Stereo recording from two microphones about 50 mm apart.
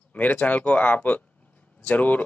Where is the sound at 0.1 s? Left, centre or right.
Left.